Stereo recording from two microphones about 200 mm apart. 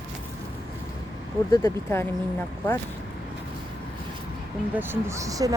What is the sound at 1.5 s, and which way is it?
Speech, 15° left (ahead or behind).